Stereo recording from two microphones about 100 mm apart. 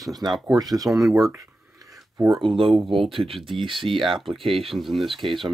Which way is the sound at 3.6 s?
60° right (ahead or behind).